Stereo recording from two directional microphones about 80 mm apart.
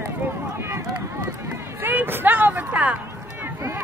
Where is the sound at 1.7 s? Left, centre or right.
Right.